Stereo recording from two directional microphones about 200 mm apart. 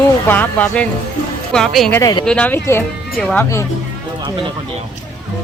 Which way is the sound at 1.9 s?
20° left (ahead or behind).